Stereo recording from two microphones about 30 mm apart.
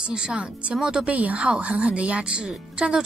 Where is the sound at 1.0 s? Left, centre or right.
Right.